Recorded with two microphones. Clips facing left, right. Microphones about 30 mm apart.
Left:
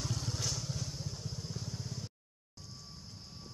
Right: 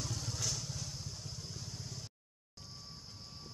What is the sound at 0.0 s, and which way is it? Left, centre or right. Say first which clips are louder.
Vehicle: left 2 dB; centre.